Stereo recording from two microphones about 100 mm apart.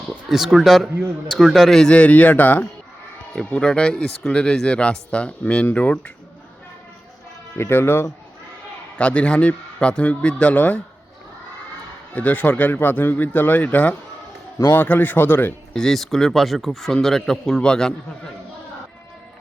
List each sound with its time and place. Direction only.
0.3 s speech: 5° right (ahead or behind); by 6.0 s 15° left (ahead or behind)
7.5 s a man's voice: 25° left (ahead or behind)
9.0 s speech: 10° left (ahead or behind)
12.1 s a man's voice: 15° left (ahead or behind)
15.7 s speech: 5° left (ahead or behind)